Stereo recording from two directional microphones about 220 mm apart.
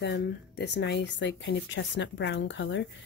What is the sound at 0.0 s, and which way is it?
Speech, 50° left (ahead or behind).